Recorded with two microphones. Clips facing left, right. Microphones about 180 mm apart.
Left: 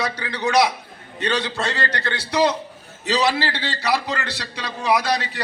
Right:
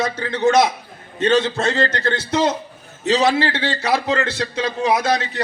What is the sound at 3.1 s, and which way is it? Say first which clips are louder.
A man's voice: right 4 dB; 50° right (ahead or behind).